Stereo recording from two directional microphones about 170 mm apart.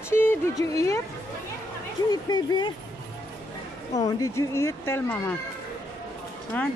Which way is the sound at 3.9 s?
20° left (ahead or behind).